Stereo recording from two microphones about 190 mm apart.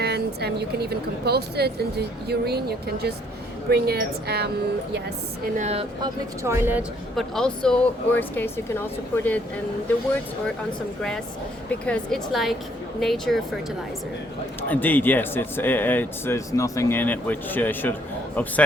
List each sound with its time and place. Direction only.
0.0 s speech: 60° right (ahead or behind)
5.5 s speech: 35° right (ahead or behind)
6.0 s speech: 15° right (ahead or behind)
7.2 s speech: 5° left (ahead or behind)
11.7 s a woman's voice: 5° left (ahead or behind)
14.7 s speech: 10° left (ahead or behind)